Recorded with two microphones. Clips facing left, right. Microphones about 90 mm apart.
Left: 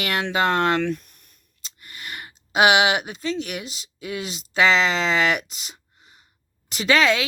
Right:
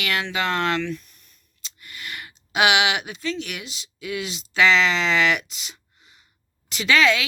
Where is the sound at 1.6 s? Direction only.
35° left (ahead or behind).